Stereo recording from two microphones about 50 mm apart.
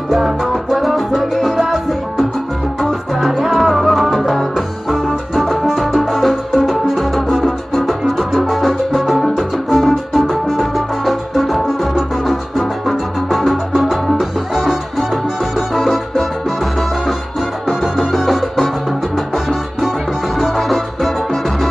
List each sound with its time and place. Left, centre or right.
0.1 s music: centre
17.6 s music: centre